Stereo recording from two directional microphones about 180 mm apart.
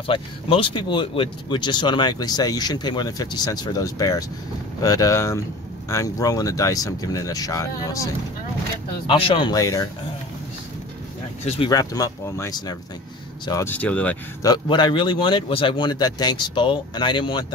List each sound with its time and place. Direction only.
0.0 s speech: 30° left (ahead or behind)
9.1 s speech: 30° left (ahead or behind)
11.4 s speech: 35° left (ahead or behind)
11.7 s speech: 20° left (ahead or behind)
14.4 s speech: 25° left (ahead or behind)